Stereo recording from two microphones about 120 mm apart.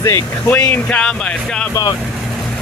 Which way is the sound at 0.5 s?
15° left (ahead or behind).